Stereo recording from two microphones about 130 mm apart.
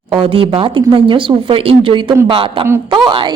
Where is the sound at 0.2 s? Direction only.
45° right (ahead or behind).